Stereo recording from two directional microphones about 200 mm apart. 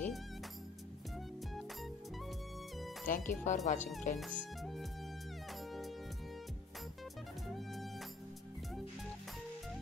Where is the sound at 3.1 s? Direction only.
40° left (ahead or behind).